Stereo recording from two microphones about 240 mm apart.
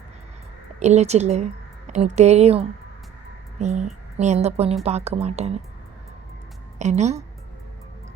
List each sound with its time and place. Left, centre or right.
0.8 s a woman's voice: right
6.7 s a woman's voice: right